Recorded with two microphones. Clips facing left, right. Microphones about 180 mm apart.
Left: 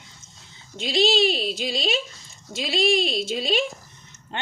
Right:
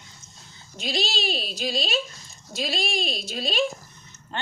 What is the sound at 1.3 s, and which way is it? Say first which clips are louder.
Speech: left 2 dB; 20° left (ahead or behind).